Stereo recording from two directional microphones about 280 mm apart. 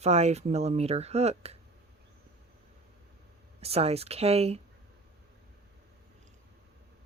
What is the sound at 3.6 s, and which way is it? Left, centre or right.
Speech, right.